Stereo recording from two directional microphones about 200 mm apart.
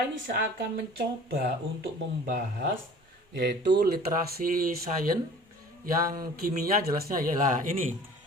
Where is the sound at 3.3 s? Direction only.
55° right (ahead or behind).